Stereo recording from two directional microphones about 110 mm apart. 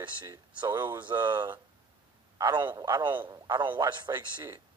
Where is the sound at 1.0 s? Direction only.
40° right (ahead or behind).